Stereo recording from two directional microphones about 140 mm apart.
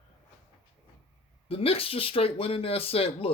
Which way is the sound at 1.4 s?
45° left (ahead or behind).